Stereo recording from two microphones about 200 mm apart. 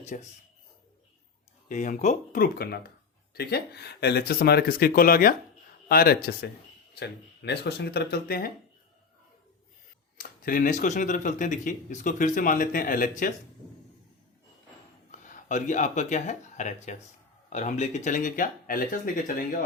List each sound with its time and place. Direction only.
0.0 s speech: 35° left (ahead or behind)
1.6 s speech: 40° left (ahead or behind)
10.2 s speech: 45° left (ahead or behind)
15.2 s speech: 40° left (ahead or behind)